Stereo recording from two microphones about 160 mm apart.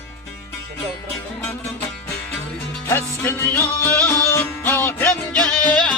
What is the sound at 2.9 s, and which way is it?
Music, 15° left (ahead or behind).